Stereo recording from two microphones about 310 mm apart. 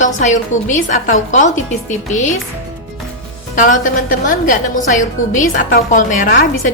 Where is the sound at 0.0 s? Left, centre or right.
Left.